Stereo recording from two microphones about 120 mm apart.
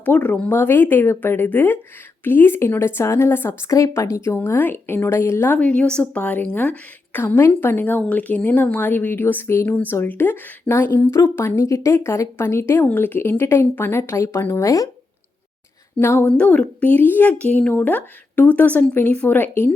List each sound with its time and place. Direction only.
0.0 s a woman's voice: 15° left (ahead or behind)
16.0 s a woman's voice: 20° left (ahead or behind)